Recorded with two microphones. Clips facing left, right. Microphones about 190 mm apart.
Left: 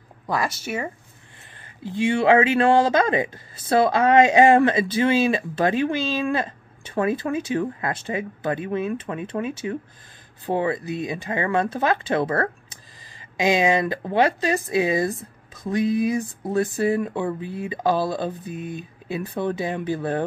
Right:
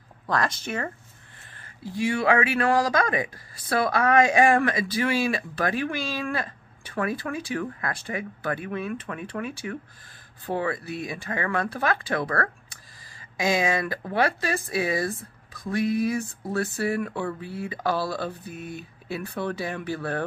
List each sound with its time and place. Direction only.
0.3 s speech: 10° left (ahead or behind)
1.8 s speech: 25° left (ahead or behind)